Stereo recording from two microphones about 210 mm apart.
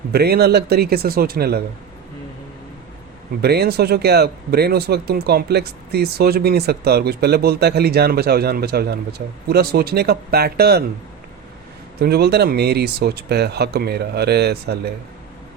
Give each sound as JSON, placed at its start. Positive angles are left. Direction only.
{"t": 0.1, "sound": "speech", "side_deg": -50}
{"t": 3.4, "sound": "speech", "side_deg": -50}
{"t": 11.9, "sound": "speech", "side_deg": -50}